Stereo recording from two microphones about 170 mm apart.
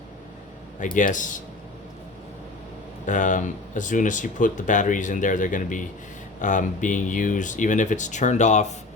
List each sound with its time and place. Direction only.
0.8 s speech: 50° left (ahead or behind)
3.1 s speech: 50° left (ahead or behind)